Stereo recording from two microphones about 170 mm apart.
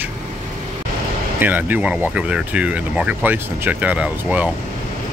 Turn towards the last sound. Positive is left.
turn(degrees=-5)  # may be behind; listen again after turning